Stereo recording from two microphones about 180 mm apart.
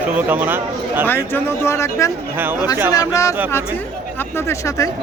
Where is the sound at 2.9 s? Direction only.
20° left (ahead or behind).